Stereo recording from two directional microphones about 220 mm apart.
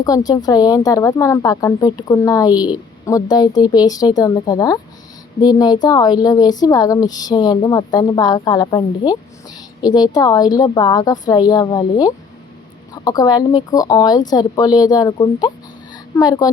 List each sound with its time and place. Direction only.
0.0 s a woman's voice: 15° left (ahead or behind)